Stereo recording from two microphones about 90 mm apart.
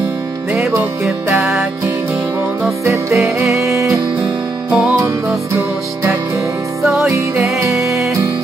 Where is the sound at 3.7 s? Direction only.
35° right (ahead or behind).